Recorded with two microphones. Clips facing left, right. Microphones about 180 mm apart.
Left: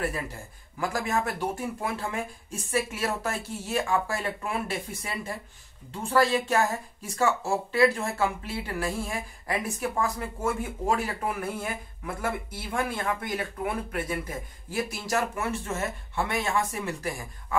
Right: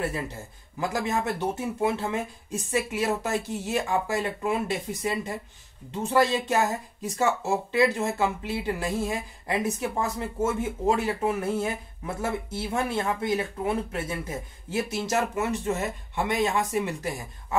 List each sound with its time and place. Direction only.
0.7 s speech: 20° right (ahead or behind)